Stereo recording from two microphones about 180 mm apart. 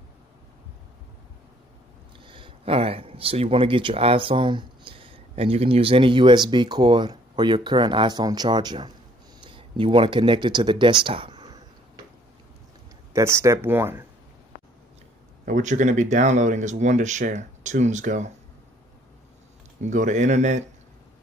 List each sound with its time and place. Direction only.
2.2 s speech: 30° right (ahead or behind)
11.1 s a sound: 30° right (ahead or behind)
13.1 s speech: 15° right (ahead or behind)
15.4 s speech: 45° right (ahead or behind)
19.8 s speech: 45° right (ahead or behind)